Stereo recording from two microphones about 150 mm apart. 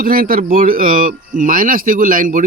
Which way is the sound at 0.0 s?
75° right (ahead or behind).